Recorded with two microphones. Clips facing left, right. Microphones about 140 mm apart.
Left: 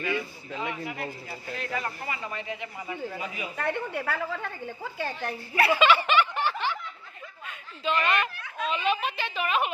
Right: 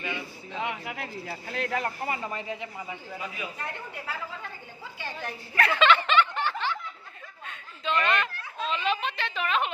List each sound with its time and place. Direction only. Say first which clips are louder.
0.6 s speech: even; 80° right
2.0 s a man's voice: right 2 dB; 40° right (ahead or behind)
3.5 s a woman's voice: left 8 dB; 65° left (ahead or behind); by 5.3 s 45° left (ahead or behind)
5.5 s snicker: left 1 dB; 10° left (ahead or behind)
7.4 s a sound: left 2 dB; 5° left (ahead or behind)
8.6 s a woman's voice: left 1 dB; 5° left (ahead or behind)